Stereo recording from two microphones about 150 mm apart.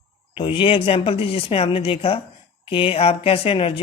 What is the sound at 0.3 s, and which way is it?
Speech, 35° left (ahead or behind).